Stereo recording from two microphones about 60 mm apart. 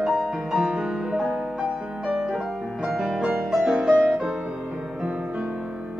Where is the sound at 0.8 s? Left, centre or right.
Centre.